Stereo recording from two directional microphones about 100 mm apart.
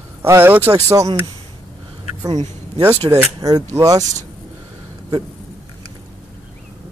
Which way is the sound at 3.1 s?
25° right (ahead or behind).